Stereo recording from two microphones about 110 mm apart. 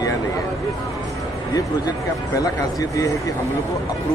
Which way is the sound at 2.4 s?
30° left (ahead or behind).